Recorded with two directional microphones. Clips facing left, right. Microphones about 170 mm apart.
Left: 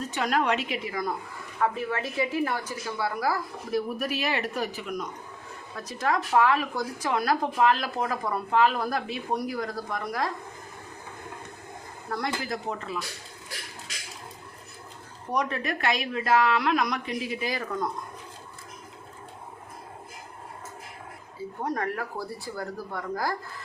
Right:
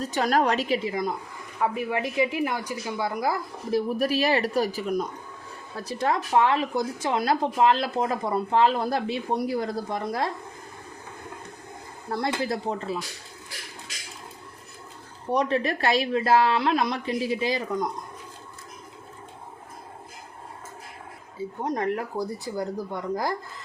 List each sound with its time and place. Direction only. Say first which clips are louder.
0.1 s a woman's voice: right 3 dB; 35° right (ahead or behind)
1.5 s speech: right 1 dB; 15° right (ahead or behind)
12.0 s speech: right 4 dB; 30° right (ahead or behind)
15.3 s speech: right 5 dB; 30° right (ahead or behind)
21.6 s speech: right 3 dB; 20° right (ahead or behind)